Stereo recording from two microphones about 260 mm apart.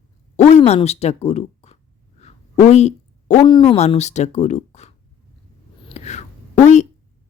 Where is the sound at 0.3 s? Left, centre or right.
Left.